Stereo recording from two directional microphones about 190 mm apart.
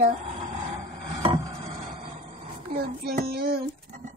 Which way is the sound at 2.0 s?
30° right (ahead or behind).